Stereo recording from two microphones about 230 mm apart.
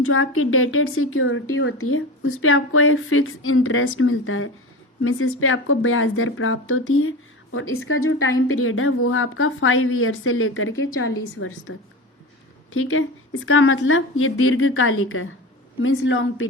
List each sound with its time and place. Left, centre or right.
0.0 s speech: left
12.7 s speech: left